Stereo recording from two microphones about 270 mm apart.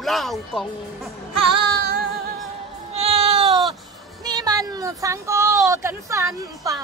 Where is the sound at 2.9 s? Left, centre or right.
Right.